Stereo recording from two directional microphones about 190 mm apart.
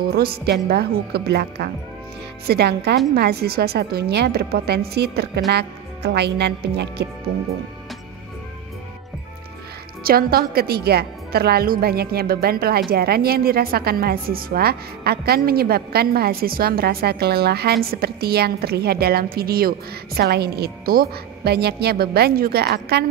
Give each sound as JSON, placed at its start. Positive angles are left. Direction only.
{"t": 0.0, "sound": "a woman's voice", "side_deg": -55}
{"t": 10.0, "sound": "a woman's voice", "side_deg": -50}